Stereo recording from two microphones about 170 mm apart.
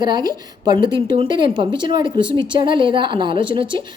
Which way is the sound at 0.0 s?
25° right (ahead or behind).